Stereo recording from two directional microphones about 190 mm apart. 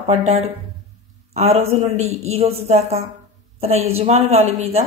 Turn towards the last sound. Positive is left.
turn(degrees=-35)  # may be behind; listen again after turning